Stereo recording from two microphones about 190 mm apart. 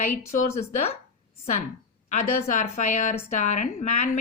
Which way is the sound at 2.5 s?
40° left (ahead or behind).